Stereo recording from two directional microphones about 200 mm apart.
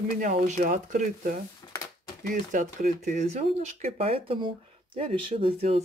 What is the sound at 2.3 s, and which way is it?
Speech, 40° right (ahead or behind).